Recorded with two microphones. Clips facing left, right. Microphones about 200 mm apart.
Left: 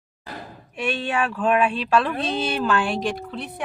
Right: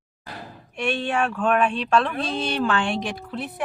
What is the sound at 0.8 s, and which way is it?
Speech, centre (ahead or behind).